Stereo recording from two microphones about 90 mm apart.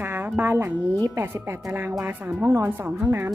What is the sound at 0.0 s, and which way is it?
Music, 25° right (ahead or behind).